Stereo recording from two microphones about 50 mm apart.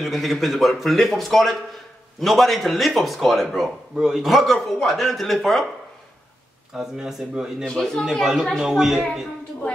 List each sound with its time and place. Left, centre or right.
0.0 s a man's voice: centre
3.9 s speech: centre
4.2 s a man's voice: centre
6.7 s speech: centre
7.6 s speech: centre
8.0 s speech: centre